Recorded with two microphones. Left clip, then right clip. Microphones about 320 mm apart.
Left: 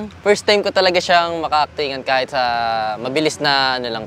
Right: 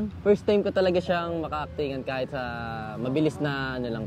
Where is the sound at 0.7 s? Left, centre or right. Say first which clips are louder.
Left 9 dB; left.